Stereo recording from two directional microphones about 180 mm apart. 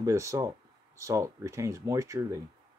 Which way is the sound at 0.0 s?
15° right (ahead or behind).